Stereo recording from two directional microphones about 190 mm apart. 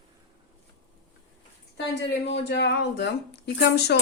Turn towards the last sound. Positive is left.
turn(degrees=60)  # may be behind; listen again after turning